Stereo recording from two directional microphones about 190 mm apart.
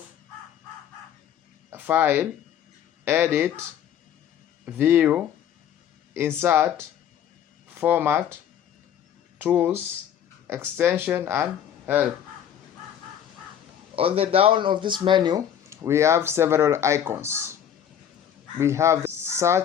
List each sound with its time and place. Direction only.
1.7 s speech: 10° right (ahead or behind)
4.6 s speech: 10° right (ahead or behind)
9.4 s speech: 10° right (ahead or behind)
13.9 s speech: 30° right (ahead or behind); by 17.4 s 15° right (ahead or behind)
18.6 s speech: 15° right (ahead or behind)